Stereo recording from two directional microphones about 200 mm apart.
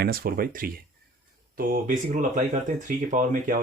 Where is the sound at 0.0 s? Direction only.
50° right (ahead or behind).